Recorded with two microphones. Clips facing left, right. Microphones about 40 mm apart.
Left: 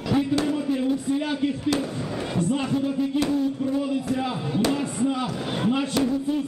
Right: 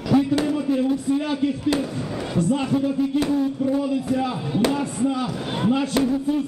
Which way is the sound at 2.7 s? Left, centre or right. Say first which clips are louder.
Right 3 dB; centre.